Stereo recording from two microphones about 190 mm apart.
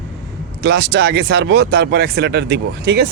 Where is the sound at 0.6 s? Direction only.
60° right (ahead or behind).